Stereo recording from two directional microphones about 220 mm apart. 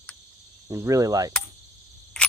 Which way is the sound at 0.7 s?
15° right (ahead or behind).